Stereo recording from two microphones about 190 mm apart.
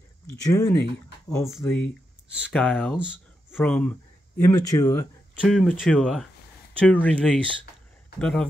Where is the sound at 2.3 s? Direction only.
5° right (ahead or behind).